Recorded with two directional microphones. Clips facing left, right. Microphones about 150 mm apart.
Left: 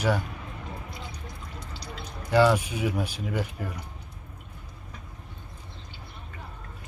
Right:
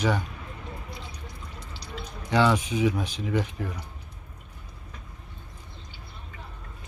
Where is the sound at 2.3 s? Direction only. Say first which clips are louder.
Left 2 dB; 5° left (ahead or behind).